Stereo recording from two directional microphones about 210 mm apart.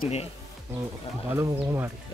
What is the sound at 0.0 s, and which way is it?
Speech, 30° left (ahead or behind).